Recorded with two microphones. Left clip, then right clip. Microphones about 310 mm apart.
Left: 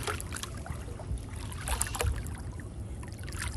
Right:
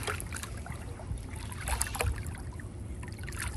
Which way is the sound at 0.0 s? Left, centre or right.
Centre.